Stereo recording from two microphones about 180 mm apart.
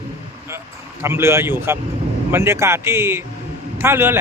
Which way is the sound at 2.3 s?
15° right (ahead or behind).